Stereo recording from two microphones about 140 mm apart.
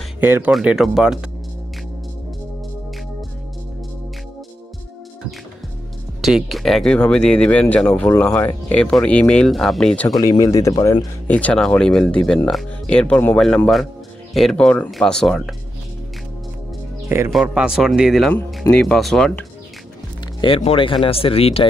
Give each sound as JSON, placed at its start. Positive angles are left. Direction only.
{"t": 0.2, "sound": "speech", "side_deg": -15}
{"t": 0.5, "sound": "speech", "side_deg": -5}
{"t": 6.2, "sound": "speech", "side_deg": 0}
{"t": 10.0, "sound": "speech", "side_deg": 25}
{"t": 11.2, "sound": "speech", "side_deg": 10}
{"t": 17.3, "sound": "speech", "side_deg": -5}
{"t": 20.3, "sound": "speech", "side_deg": 40}